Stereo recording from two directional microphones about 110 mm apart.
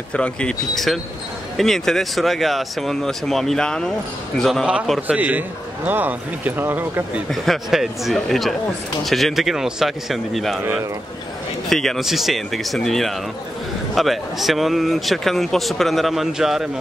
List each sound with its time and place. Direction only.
0.1 s speech: 10° left (ahead or behind)
5.0 s speech: 15° right (ahead or behind)
7.2 s speech: centre (ahead or behind)
11.7 s speech: 5° left (ahead or behind)